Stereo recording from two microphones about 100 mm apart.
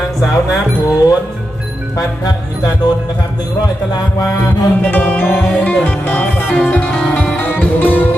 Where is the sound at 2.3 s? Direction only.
35° left (ahead or behind).